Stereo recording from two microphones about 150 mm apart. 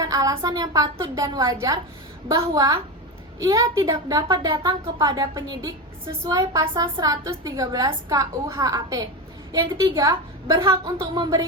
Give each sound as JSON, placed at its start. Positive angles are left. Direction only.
{"t": 0.0, "sound": "a woman's voice", "side_deg": -25}